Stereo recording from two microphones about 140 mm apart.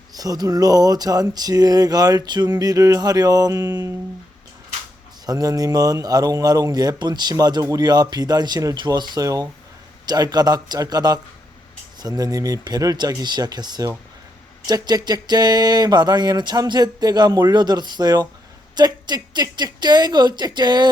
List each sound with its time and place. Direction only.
0.1 s a man's voice: 25° right (ahead or behind)
5.2 s a man's voice: 25° right (ahead or behind)